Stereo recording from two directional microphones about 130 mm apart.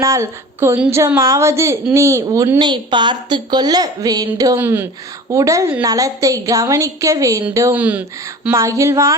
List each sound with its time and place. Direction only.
0.0 s a woman's voice: 20° right (ahead or behind)
7.8 s speech: 10° right (ahead or behind)
8.2 s a woman's voice: 25° right (ahead or behind)